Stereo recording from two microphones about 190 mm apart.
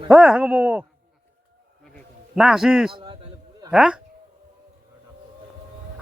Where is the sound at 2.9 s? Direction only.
25° right (ahead or behind).